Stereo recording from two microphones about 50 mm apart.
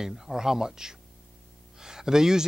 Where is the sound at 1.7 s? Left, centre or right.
Centre.